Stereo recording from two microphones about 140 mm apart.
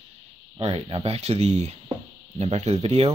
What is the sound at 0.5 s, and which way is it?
Speech, 45° right (ahead or behind).